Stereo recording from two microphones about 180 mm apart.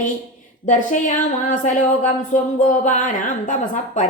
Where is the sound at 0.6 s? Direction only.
45° left (ahead or behind).